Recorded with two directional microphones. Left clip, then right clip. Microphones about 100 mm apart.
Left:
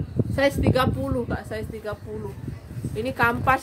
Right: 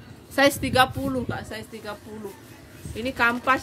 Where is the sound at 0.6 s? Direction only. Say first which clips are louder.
Right 2 dB; 10° left (ahead or behind).